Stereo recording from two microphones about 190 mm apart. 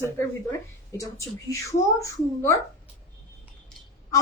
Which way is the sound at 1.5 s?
15° left (ahead or behind).